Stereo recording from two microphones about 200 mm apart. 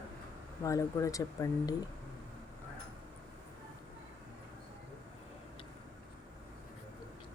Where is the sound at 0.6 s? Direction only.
15° left (ahead or behind).